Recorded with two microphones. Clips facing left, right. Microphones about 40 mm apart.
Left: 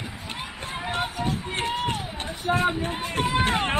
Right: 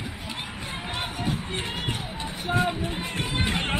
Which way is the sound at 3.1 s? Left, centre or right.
Left.